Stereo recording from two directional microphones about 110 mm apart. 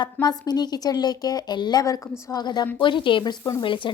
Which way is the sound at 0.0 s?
40° left (ahead or behind).